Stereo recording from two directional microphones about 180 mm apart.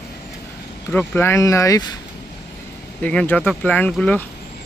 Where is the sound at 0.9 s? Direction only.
10° left (ahead or behind).